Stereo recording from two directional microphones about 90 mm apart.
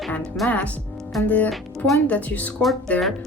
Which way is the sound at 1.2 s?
20° left (ahead or behind).